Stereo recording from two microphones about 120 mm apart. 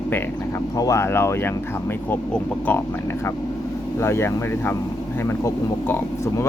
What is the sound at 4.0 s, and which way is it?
Speech, 20° left (ahead or behind).